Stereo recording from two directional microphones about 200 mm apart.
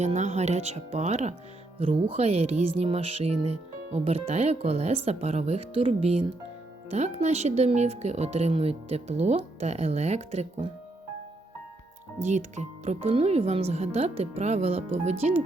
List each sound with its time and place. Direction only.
0.0 s speech: 35° right (ahead or behind)
12.2 s speech: 35° right (ahead or behind)